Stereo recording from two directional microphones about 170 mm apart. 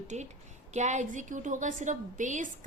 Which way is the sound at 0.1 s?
40° right (ahead or behind).